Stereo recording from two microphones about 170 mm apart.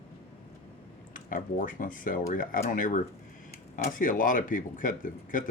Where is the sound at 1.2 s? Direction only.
55° left (ahead or behind).